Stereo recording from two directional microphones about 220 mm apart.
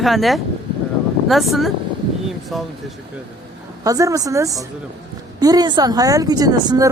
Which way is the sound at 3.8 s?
15° right (ahead or behind).